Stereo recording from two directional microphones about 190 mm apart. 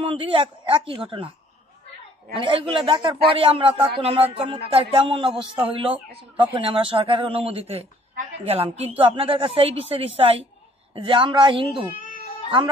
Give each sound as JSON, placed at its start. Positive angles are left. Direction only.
{"t": 0.0, "sound": "a man's voice", "side_deg": -25}
{"t": 2.3, "sound": "a man's voice", "side_deg": -30}